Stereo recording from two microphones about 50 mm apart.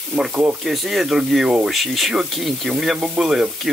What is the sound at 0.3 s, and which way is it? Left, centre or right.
Speech, right.